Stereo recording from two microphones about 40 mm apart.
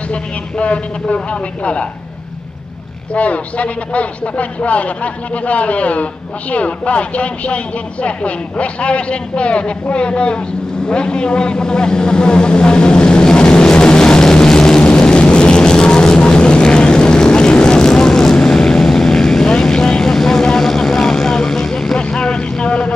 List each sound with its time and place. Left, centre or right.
0.1 s speech: left
3.2 s speech: left
10.9 s vehicle: left